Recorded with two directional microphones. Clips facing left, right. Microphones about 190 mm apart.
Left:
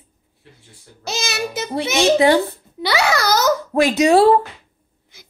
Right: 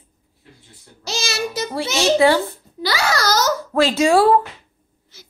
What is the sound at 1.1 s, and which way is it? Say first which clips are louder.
A child's voice: even; 20° left (ahead or behind).